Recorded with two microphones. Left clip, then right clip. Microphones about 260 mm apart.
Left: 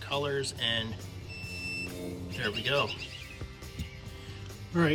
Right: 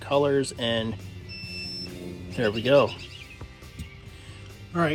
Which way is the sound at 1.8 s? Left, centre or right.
Centre.